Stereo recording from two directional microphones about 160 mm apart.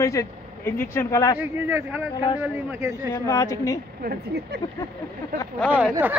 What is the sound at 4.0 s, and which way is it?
Speech, 75° right (ahead or behind).